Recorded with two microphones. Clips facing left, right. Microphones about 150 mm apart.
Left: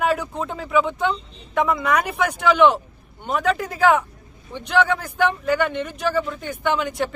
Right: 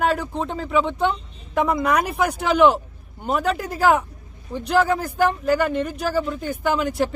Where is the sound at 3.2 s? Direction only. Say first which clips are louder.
Even; 5° right (ahead or behind).